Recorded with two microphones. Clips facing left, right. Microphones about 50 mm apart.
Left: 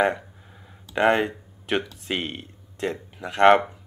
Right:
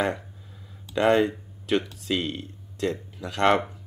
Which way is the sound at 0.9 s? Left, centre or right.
Left.